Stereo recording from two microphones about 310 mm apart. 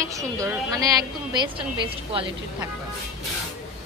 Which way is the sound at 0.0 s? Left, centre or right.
Centre.